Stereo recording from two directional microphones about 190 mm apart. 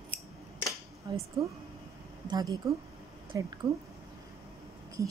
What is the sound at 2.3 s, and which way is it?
Speech, 20° right (ahead or behind).